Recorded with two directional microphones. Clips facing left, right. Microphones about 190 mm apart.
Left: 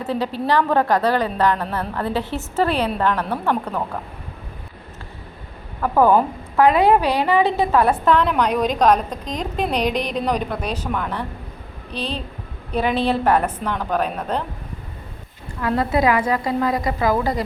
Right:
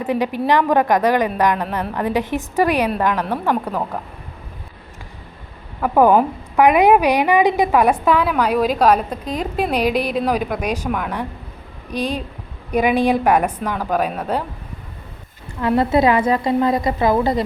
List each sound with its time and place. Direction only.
0.0 s a woman's voice: 15° right (ahead or behind)
5.8 s a woman's voice: 15° right (ahead or behind)
15.6 s a woman's voice: 25° right (ahead or behind)